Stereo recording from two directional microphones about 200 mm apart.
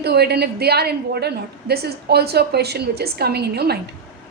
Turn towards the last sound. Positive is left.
turn(degrees=-55)  # may be behind; listen again after turning